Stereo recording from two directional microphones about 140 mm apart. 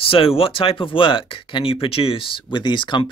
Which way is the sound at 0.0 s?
40° left (ahead or behind).